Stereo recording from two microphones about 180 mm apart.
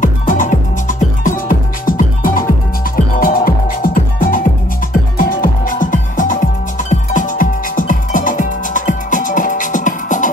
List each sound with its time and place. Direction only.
0.0 s music: 45° left (ahead or behind)